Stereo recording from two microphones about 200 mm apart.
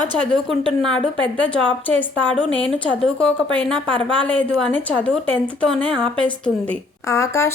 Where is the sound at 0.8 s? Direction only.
5° left (ahead or behind).